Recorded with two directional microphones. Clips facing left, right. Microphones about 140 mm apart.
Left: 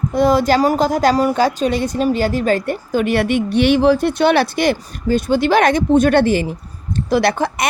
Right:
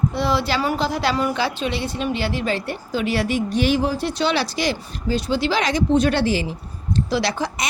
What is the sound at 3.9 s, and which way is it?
A woman's voice, 55° left (ahead or behind).